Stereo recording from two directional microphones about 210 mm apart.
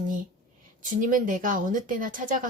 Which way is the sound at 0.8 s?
40° right (ahead or behind).